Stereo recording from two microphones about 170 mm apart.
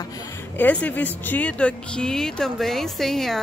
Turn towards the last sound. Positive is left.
turn(degrees=0)  # may be behind; listen again after turning